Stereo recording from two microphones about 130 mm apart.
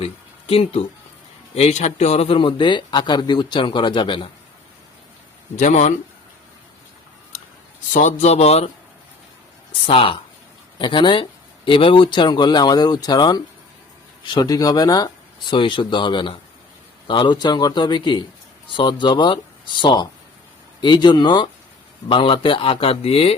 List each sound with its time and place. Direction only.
0.0 s a man's voice: 45° left (ahead or behind)
5.5 s speech: 65° left (ahead or behind)
7.9 s speech: 65° left (ahead or behind)
9.8 s a man's voice: 45° left (ahead or behind)